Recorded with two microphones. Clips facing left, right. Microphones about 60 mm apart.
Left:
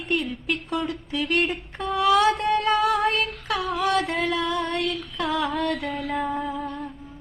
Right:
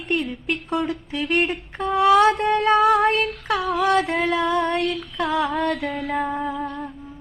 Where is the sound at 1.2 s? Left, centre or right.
Centre.